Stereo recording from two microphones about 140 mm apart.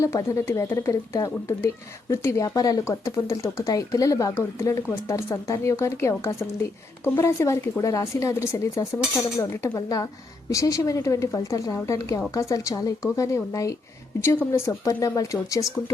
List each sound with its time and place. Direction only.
0.0 s speech: 20° left (ahead or behind)